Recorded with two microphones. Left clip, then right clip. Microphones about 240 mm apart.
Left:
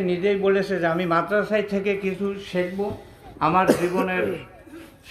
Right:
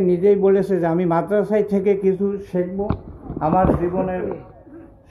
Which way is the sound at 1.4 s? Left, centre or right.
Right.